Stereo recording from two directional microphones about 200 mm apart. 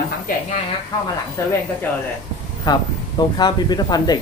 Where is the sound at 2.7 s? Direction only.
20° left (ahead or behind).